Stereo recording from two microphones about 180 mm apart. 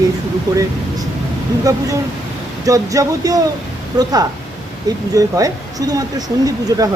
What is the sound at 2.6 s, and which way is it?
Speech, 20° right (ahead or behind).